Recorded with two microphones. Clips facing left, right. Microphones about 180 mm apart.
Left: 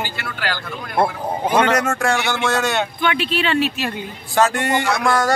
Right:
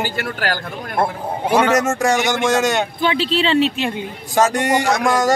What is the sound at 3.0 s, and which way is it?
Speech, 30° right (ahead or behind).